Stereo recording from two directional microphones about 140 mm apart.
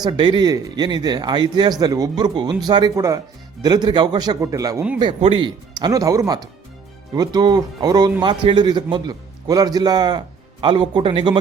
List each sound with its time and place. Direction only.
0.0 s speech: 35° right (ahead or behind)
5.2 s a man's voice: 35° right (ahead or behind)